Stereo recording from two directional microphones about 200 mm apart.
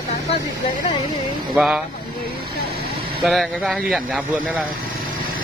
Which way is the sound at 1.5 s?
5° right (ahead or behind).